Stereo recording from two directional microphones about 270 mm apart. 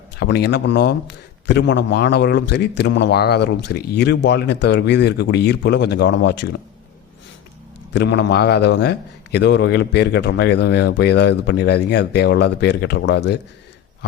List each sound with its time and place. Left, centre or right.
0.2 s a man's voice: left
7.9 s a man's voice: left